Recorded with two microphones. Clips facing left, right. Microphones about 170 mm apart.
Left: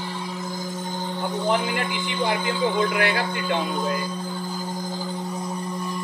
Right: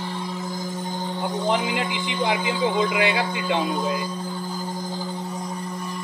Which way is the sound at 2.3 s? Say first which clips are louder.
Right 1 dB; 15° right (ahead or behind).